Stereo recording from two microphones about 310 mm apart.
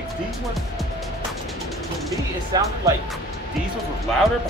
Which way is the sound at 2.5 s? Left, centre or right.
Centre.